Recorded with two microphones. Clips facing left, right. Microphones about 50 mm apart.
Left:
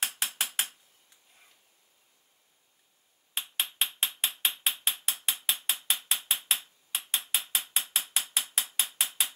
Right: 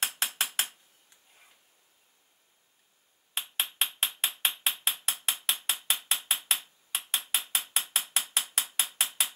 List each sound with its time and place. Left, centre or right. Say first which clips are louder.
0.4 s mechanisms: right 1 dB; centre
3.3 s hammer: even; centre
4.6 s mechanisms: even; centre
5.0 s ratchet: even; centre
6.0 s mechanisms: even; centre
6.9 s a sound: even; centre
7.4 s ratchet: right 1 dB; centre